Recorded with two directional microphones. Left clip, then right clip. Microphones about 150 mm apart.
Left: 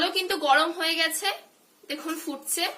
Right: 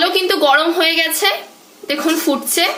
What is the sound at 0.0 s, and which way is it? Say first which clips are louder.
A woman's voice: right 12 dB; 20° right (ahead or behind).